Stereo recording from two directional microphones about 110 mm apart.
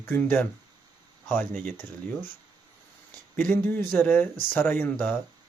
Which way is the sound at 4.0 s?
15° left (ahead or behind).